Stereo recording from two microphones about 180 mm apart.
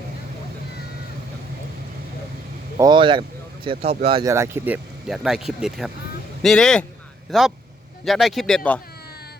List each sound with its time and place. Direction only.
2.7 s speech: 25° right (ahead or behind)
4.2 s speech: 15° right (ahead or behind); by 8.8 s 5° left (ahead or behind)